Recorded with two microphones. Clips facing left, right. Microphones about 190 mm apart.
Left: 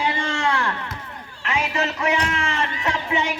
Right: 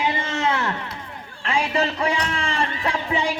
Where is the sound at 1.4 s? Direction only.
30° right (ahead or behind).